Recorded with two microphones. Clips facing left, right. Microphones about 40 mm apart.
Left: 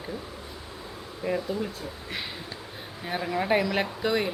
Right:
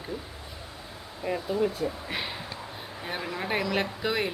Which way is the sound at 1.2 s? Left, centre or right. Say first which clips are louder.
Left 1 dB; centre.